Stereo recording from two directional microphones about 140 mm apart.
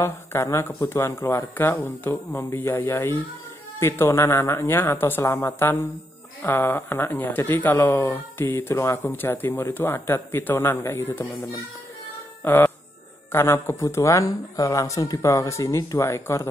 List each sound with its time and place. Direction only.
0.0 s speech: 20° left (ahead or behind)
12.4 s speech: 15° left (ahead or behind)